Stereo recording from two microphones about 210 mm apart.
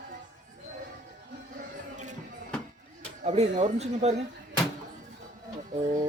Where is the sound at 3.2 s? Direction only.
30° right (ahead or behind).